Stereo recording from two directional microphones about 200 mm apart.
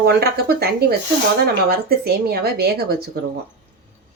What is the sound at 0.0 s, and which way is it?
Speech, 50° right (ahead or behind).